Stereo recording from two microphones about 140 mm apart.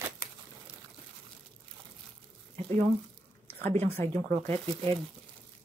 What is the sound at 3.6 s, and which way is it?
Speech, 50° right (ahead or behind).